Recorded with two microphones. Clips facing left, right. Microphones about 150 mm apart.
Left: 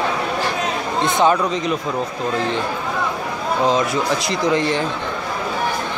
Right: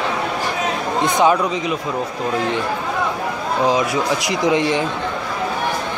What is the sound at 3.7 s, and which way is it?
Speech, 15° right (ahead or behind).